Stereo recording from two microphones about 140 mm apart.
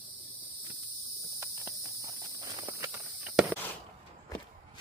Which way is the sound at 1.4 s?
25° right (ahead or behind).